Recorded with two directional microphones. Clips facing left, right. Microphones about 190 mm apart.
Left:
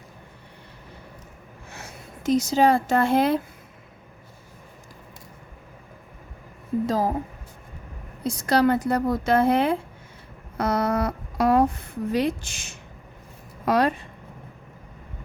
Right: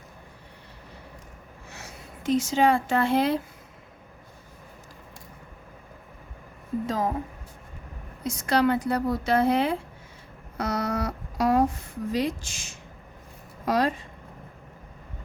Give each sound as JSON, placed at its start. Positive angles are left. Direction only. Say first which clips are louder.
{"t": 1.7, "sound": "speech", "louder": "left 2 dB", "side_deg": 50}
{"t": 6.8, "sound": "speech", "louder": "left 3 dB", "side_deg": 35}
{"t": 8.2, "sound": "a woman's voice", "louder": "left 3 dB", "side_deg": 35}